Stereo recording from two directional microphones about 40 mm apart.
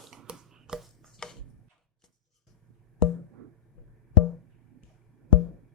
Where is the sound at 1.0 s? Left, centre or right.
Centre.